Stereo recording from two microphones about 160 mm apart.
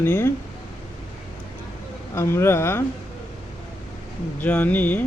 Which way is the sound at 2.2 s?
15° left (ahead or behind).